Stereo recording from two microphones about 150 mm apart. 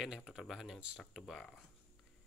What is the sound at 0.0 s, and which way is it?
Speech, 5° right (ahead or behind).